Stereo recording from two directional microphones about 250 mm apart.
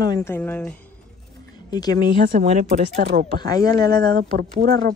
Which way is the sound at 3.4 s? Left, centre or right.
Centre.